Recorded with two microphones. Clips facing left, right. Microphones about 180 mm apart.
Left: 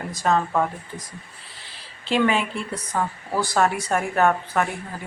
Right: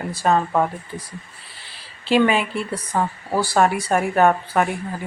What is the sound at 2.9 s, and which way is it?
Speech, 30° right (ahead or behind).